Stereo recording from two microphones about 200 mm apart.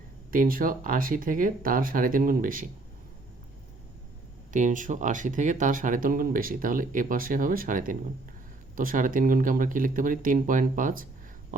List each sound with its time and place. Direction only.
0.3 s speech: 45° right (ahead or behind)
4.5 s speech: 40° right (ahead or behind)